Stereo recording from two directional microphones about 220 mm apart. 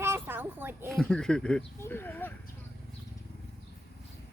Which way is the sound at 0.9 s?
5° left (ahead or behind).